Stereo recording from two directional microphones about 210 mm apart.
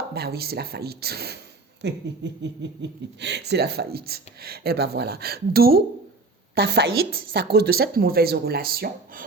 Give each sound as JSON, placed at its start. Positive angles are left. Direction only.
{"t": 0.1, "sound": "speech", "side_deg": -50}